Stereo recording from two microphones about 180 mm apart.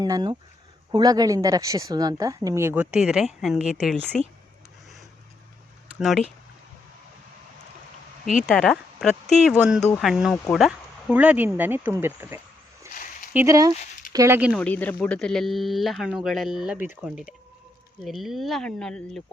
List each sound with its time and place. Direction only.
0.0 s a woman's voice: 20° right (ahead or behind); by 4.2 s 5° left (ahead or behind)
6.0 s speech: centre (ahead or behind)
8.4 s speech: 5° left (ahead or behind)
12.9 s a sound: 50° left (ahead or behind)
13.3 s speech: 15° right (ahead or behind)
14.5 s speech: 10° left (ahead or behind)